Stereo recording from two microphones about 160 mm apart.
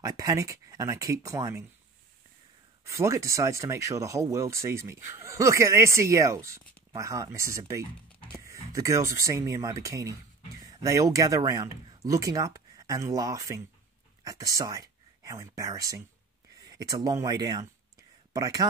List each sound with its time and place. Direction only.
0.0 s speech: 20° right (ahead or behind)
2.8 s speech: 20° right (ahead or behind)